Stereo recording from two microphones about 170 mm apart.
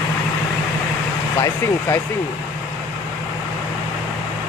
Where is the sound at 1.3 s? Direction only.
15° left (ahead or behind).